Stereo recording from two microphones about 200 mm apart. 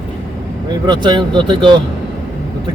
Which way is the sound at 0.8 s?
20° right (ahead or behind).